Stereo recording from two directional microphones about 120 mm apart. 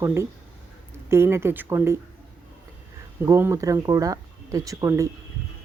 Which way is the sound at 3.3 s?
25° right (ahead or behind).